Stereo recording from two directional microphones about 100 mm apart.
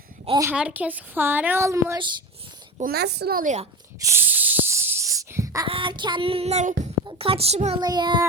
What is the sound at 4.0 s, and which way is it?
Snake, 25° right (ahead or behind).